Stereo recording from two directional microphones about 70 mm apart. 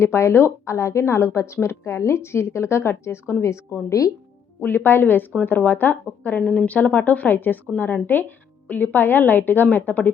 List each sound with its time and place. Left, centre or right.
0.0 s a woman's voice: left
4.6 s a woman's voice: left